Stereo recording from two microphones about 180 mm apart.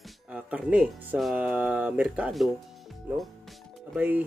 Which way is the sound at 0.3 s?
5° right (ahead or behind).